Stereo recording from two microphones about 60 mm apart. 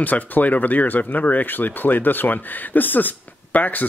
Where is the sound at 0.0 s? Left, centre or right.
Left.